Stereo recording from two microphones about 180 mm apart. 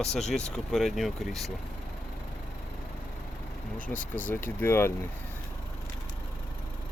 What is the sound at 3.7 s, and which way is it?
Speech, 50° left (ahead or behind).